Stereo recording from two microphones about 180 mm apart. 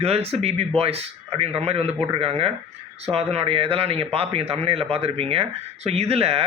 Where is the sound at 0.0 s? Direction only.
35° right (ahead or behind).